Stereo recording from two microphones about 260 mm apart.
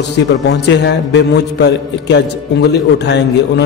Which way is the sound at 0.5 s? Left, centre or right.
Left.